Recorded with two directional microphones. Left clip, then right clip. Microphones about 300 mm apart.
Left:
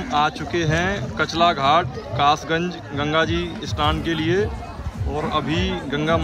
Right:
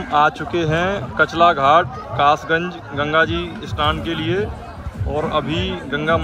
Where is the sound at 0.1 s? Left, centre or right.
Centre.